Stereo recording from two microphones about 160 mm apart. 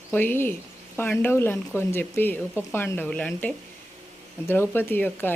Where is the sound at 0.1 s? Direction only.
10° left (ahead or behind).